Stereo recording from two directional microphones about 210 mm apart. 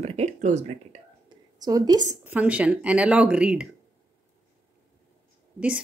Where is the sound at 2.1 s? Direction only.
10° right (ahead or behind).